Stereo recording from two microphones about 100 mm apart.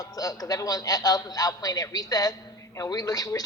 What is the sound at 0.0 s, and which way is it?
A man's voice, 35° left (ahead or behind).